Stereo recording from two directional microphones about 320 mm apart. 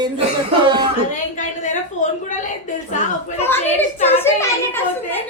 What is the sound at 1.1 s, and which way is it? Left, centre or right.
A woman's voice, left.